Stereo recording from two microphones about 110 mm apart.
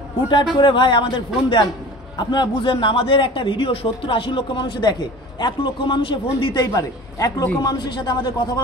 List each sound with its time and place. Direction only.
0.6 s speech: 45° left (ahead or behind)
6.5 s a man's voice: 35° left (ahead or behind)